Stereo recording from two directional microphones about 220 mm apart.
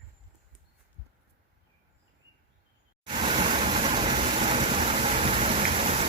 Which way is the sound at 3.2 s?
25° right (ahead or behind).